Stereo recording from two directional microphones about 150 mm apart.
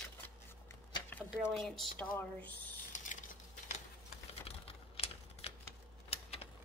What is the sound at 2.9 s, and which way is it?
Cutlery, 55° left (ahead or behind).